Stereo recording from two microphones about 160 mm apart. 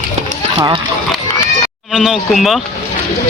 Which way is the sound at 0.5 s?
25° right (ahead or behind).